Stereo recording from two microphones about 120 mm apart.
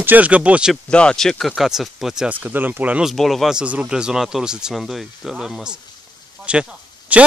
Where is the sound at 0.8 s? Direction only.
10° left (ahead or behind).